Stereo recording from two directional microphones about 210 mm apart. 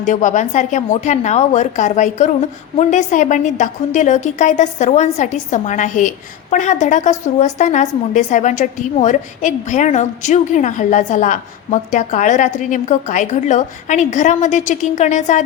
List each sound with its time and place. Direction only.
0.0 s a woman's voice: 35° left (ahead or behind)